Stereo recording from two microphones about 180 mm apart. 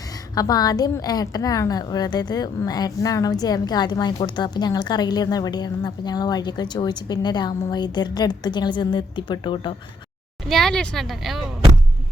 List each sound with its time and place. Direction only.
0.3 s a woman's voice: 20° left (ahead or behind)
10.5 s speech: 5° left (ahead or behind)